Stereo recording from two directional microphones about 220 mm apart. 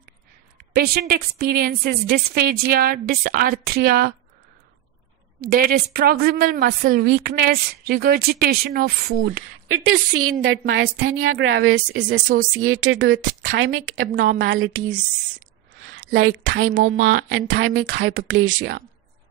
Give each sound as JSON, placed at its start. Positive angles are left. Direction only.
{"t": 0.7, "sound": "a woman's voice", "side_deg": -45}
{"t": 5.4, "sound": "a woman's voice", "side_deg": -40}
{"t": 9.7, "sound": "a woman's voice", "side_deg": -75}
{"t": 14.0, "sound": "speech", "side_deg": -60}
{"t": 16.1, "sound": "speech", "side_deg": -65}